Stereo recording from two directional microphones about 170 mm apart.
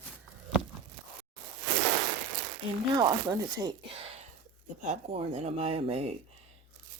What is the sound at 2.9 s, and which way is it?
Speech, 25° right (ahead or behind).